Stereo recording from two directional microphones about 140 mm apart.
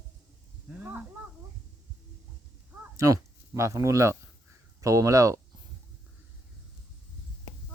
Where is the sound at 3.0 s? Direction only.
20° right (ahead or behind).